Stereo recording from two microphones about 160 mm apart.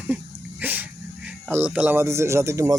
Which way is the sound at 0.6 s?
10° right (ahead or behind).